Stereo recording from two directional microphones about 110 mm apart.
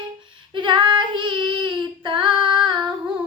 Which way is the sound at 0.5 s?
45° right (ahead or behind).